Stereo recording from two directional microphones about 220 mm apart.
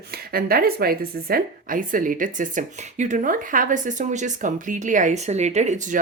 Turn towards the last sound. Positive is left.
turn(degrees=-35)  # may be behind; listen again after turning